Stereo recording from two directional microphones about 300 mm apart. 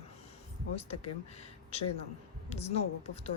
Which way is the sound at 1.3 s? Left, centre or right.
Left.